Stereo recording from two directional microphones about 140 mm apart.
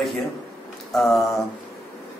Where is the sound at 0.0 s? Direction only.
Centre (ahead or behind).